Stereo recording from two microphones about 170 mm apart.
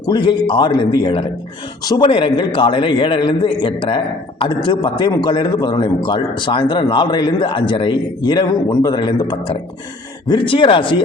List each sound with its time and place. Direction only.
0.0 s a man's voice: 25° left (ahead or behind)